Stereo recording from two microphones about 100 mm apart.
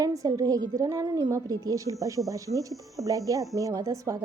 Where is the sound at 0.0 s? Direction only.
35° right (ahead or behind).